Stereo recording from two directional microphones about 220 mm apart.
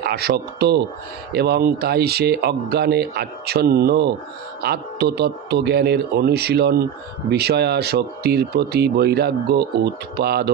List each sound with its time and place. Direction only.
0.0 s speech: 45° right (ahead or behind)